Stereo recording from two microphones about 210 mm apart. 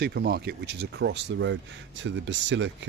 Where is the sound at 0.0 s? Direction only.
50° right (ahead or behind).